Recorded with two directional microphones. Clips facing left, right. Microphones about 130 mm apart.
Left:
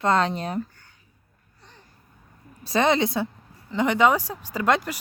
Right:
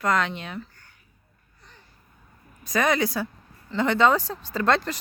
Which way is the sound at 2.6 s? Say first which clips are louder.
Left 2 dB; 25° left (ahead or behind).